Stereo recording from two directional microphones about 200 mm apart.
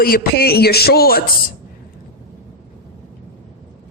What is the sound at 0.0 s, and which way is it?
A woman's voice, 50° left (ahead or behind).